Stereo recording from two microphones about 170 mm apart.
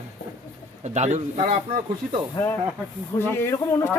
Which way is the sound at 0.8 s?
40° right (ahead or behind).